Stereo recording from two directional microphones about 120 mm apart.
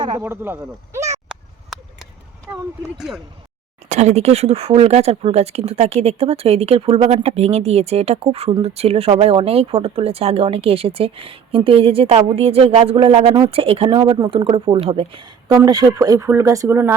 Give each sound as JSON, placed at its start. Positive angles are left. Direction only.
{"t": 0.2, "sound": "speech", "side_deg": -20}
{"t": 3.8, "sound": "speech", "side_deg": -70}
{"t": 15.5, "sound": "speech", "side_deg": -30}